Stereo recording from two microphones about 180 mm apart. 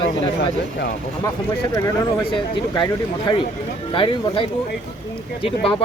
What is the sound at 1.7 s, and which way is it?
Speech, 20° left (ahead or behind).